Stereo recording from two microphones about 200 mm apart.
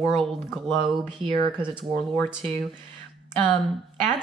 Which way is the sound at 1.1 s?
25° right (ahead or behind).